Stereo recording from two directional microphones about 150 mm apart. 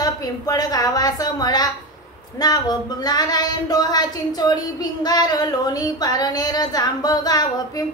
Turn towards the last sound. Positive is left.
turn(degrees=25)  # may be behind; listen again after turning